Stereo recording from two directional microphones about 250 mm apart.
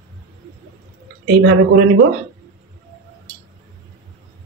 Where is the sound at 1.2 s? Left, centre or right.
Right.